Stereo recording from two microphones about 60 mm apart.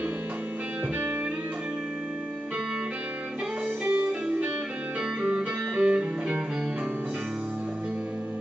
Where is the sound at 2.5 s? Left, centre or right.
Centre.